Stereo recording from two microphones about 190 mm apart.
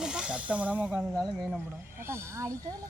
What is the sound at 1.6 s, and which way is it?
Speech, 10° right (ahead or behind).